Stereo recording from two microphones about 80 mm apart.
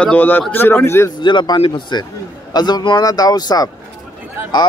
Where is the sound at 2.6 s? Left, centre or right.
Left.